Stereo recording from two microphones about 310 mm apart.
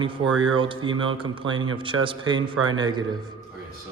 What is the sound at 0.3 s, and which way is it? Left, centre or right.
Speech, centre.